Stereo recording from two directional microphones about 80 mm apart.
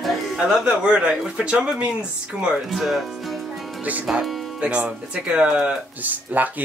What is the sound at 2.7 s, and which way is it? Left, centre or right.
Speech, centre.